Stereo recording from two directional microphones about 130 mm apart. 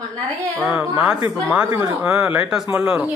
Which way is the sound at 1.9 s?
10° right (ahead or behind).